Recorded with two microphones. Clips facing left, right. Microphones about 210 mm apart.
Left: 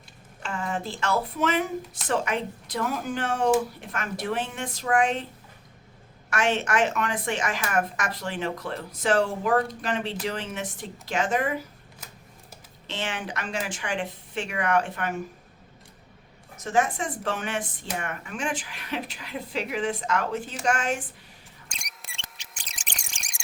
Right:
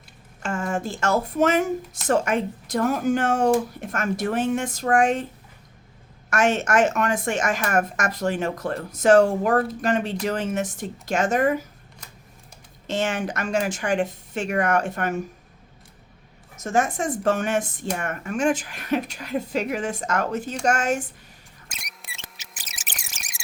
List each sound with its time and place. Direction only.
0.4 s speech: 45° right (ahead or behind)
6.3 s speech: 45° right (ahead or behind)
12.9 s speech: 45° right (ahead or behind)
16.6 s speech: 45° right (ahead or behind)
21.7 s a sound: 5° right (ahead or behind)